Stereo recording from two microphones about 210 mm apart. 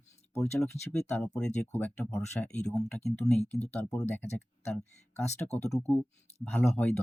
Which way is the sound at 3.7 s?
10° left (ahead or behind).